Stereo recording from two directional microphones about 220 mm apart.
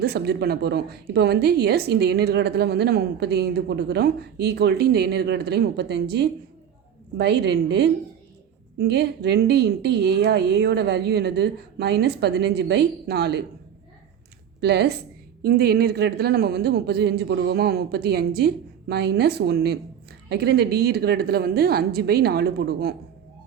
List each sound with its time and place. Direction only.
0.0 s a woman's voice: 45° right (ahead or behind)
14.6 s a woman's voice: 50° right (ahead or behind)